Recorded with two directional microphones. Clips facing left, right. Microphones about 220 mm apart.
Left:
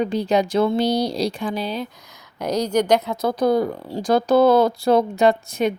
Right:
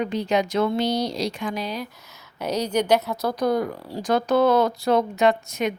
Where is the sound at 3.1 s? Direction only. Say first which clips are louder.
Left 4 dB; 25° left (ahead or behind).